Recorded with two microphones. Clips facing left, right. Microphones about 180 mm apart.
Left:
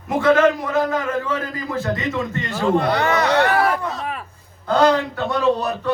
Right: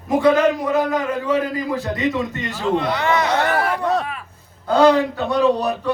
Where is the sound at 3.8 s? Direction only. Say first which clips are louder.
Right 7 dB; 65° right (ahead or behind).